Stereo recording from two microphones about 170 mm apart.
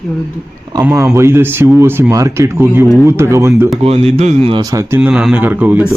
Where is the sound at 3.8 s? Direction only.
35° right (ahead or behind).